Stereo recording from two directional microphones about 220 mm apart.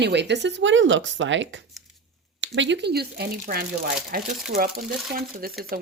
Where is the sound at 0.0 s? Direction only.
50° right (ahead or behind).